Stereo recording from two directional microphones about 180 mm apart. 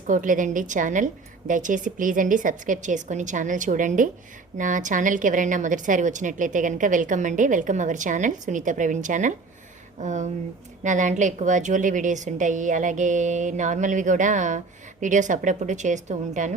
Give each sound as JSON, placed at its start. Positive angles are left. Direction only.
{"t": 0.1, "sound": "a woman's voice", "side_deg": -45}